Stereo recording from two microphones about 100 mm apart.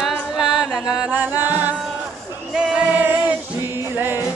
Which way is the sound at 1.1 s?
20° right (ahead or behind).